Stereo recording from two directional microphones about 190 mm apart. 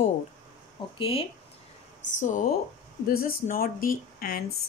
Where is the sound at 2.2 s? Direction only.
45° left (ahead or behind).